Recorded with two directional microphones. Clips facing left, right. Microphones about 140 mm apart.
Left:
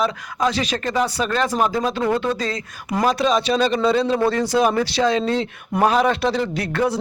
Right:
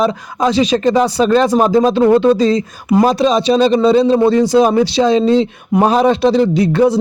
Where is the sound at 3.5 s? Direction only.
20° right (ahead or behind).